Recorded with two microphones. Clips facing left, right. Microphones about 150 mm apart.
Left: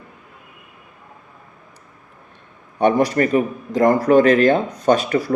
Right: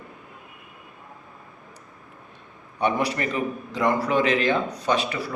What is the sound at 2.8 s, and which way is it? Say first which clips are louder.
A man's voice: left 8 dB; 45° left (ahead or behind).